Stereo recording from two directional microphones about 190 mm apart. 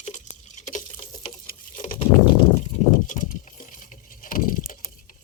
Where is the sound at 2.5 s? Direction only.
40° left (ahead or behind).